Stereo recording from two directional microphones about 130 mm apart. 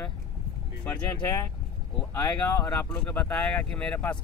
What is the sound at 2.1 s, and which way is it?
Speech, 20° left (ahead or behind).